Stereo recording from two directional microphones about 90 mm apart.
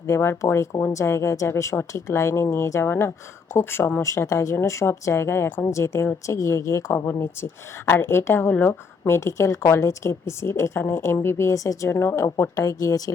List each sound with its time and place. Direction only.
0.1 s speech: 30° left (ahead or behind)
6.9 s speech: 25° left (ahead or behind); by 13.0 s 45° left (ahead or behind)